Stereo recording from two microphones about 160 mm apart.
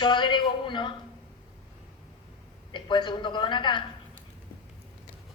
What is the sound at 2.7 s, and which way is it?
A woman's voice, 30° left (ahead or behind).